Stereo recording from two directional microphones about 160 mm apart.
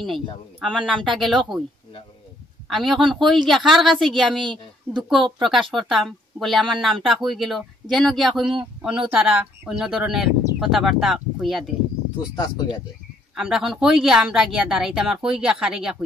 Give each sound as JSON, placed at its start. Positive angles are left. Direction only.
{"t": 0.0, "sound": "a woman's voice", "side_deg": 0}
{"t": 2.7, "sound": "a woman's voice", "side_deg": 0}
{"t": 12.4, "sound": "speech", "side_deg": 25}
{"t": 13.3, "sound": "a woman's voice", "side_deg": -5}